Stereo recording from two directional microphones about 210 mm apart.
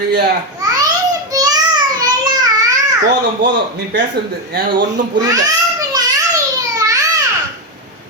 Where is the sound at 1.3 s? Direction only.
20° right (ahead or behind).